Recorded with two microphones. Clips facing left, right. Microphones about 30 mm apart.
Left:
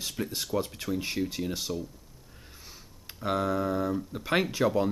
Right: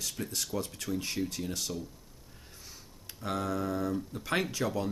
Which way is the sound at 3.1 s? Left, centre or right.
Centre.